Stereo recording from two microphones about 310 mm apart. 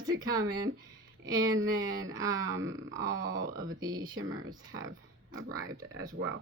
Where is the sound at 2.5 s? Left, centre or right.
Right.